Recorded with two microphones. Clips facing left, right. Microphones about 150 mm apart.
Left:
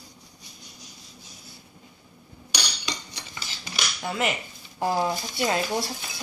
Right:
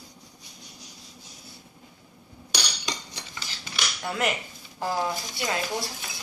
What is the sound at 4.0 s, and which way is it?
Speech, centre (ahead or behind).